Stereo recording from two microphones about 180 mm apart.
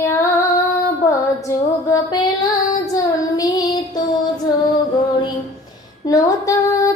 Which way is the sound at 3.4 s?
20° left (ahead or behind).